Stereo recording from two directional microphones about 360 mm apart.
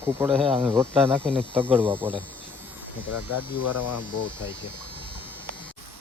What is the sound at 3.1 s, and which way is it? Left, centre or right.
Speech, left.